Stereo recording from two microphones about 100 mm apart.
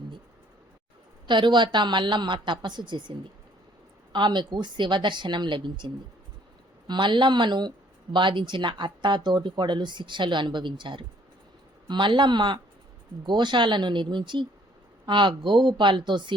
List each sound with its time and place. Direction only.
1.3 s speech: 50° right (ahead or behind)